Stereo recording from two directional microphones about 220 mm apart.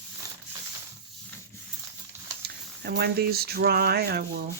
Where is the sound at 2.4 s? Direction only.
45° right (ahead or behind).